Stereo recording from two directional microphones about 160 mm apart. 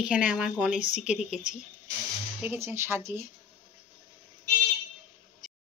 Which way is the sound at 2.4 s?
15° right (ahead or behind).